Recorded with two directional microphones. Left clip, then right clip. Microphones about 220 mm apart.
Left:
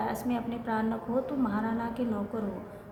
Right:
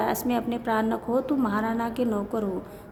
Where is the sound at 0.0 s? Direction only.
50° right (ahead or behind).